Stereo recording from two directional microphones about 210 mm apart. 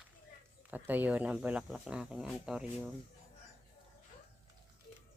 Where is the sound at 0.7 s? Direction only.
10° right (ahead or behind).